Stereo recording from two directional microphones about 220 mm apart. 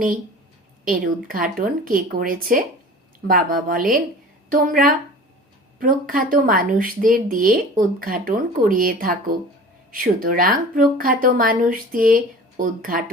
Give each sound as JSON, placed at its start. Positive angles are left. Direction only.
{"t": 0.9, "sound": "a woman's voice", "side_deg": -40}